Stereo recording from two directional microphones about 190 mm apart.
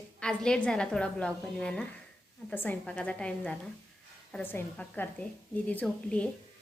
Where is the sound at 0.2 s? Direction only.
5° left (ahead or behind).